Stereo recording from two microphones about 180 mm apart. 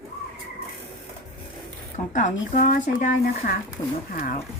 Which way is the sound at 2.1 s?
40° left (ahead or behind).